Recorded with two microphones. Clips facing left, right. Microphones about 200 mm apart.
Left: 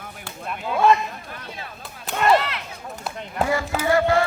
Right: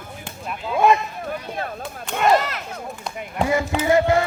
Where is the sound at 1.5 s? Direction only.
55° right (ahead or behind).